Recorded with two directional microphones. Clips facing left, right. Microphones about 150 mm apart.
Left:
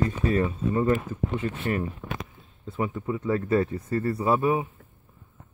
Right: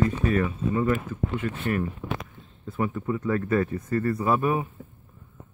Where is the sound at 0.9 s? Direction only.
35° left (ahead or behind).